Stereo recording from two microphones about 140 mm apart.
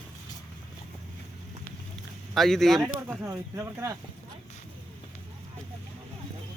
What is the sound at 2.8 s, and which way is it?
Speech, 20° right (ahead or behind).